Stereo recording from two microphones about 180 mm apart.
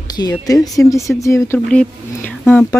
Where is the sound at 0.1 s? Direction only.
20° left (ahead or behind).